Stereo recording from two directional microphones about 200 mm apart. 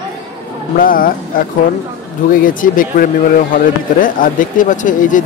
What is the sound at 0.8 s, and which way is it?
Speech, 45° left (ahead or behind).